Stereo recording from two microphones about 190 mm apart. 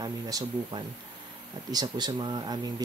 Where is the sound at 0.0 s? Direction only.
20° right (ahead or behind).